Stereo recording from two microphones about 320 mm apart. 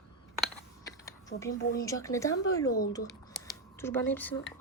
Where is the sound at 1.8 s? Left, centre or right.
Centre.